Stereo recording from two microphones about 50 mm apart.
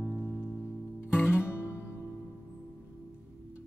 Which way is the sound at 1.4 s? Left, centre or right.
Left.